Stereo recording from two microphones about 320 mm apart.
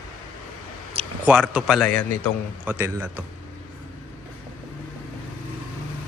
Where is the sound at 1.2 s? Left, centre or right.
Centre.